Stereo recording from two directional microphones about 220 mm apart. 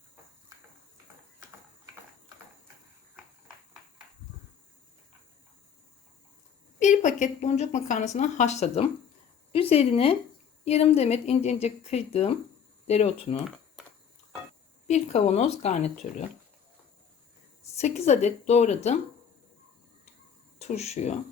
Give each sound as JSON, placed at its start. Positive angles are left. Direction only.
{"t": 6.7, "sound": "speech", "side_deg": 35}
{"t": 14.8, "sound": "speech", "side_deg": 30}
{"t": 17.6, "sound": "speech", "side_deg": 30}
{"t": 20.6, "sound": "speech", "side_deg": 30}